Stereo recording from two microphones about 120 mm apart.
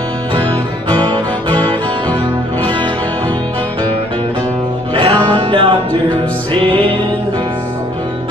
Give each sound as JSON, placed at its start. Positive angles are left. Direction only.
{"t": 1.0, "sound": "music", "side_deg": -45}
{"t": 4.9, "sound": "music", "side_deg": -45}